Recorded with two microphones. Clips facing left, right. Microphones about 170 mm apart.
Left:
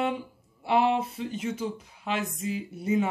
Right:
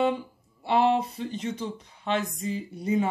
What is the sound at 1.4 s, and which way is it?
Speech, 5° left (ahead or behind).